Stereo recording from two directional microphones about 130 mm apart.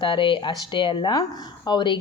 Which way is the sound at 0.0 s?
40° left (ahead or behind).